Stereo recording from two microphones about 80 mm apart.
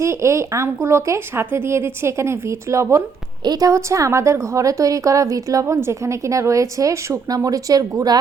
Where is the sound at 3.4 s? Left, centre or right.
Right.